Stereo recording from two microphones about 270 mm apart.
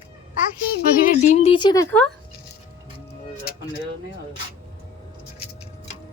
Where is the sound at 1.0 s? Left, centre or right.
Left.